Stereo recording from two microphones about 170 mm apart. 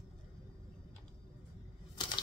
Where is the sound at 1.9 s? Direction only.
25° left (ahead or behind).